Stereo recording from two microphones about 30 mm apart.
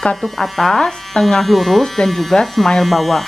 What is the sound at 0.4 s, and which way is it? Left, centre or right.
Speech, centre.